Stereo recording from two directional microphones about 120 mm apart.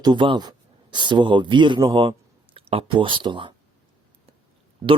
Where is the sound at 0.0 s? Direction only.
40° right (ahead or behind).